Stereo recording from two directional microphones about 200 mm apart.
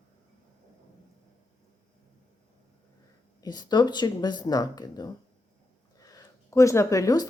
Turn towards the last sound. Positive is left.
turn(degrees=15)  # may be behind; listen again after turning